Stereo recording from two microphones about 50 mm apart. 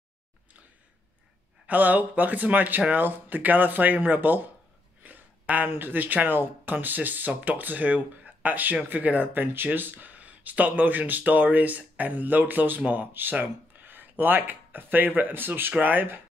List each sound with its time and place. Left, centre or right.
1.7 s speech: right
5.0 s a sound: right
5.7 s speech: right